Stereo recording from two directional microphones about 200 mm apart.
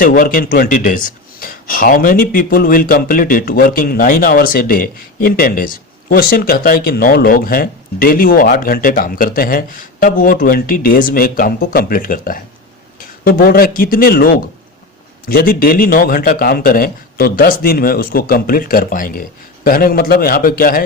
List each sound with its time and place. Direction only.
0.0 s speech: 45° left (ahead or behind)